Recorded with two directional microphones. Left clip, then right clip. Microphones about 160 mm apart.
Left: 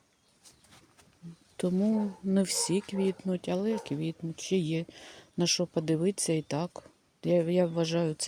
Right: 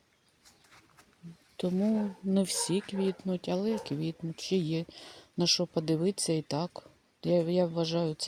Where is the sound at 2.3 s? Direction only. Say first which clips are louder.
Left 1 dB; 5° left (ahead or behind).